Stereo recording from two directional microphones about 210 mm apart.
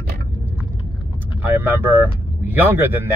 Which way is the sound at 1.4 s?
10° right (ahead or behind).